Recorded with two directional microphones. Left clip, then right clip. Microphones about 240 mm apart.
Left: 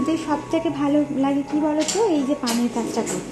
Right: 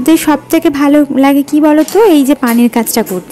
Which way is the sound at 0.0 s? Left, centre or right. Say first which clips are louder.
Right 14 dB; right.